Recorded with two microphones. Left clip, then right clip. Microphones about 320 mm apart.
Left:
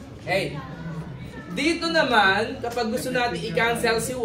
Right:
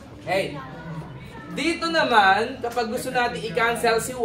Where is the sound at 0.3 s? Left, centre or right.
Centre.